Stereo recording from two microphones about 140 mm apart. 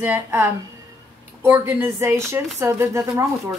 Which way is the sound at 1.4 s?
20° right (ahead or behind).